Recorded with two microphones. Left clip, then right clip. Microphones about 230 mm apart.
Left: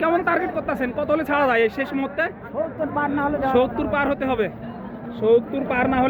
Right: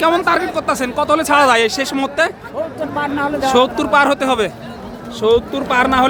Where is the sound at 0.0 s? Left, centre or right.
Centre.